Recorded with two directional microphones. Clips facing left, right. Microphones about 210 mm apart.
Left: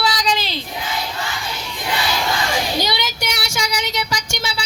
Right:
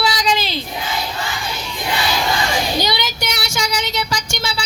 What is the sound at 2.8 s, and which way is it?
Child singing, 5° left (ahead or behind).